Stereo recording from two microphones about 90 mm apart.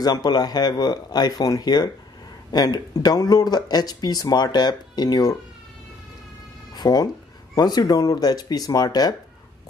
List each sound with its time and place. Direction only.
0.0 s speech: 50° left (ahead or behind)
6.7 s cat: 50° left (ahead or behind)
7.5 s speech: 50° left (ahead or behind)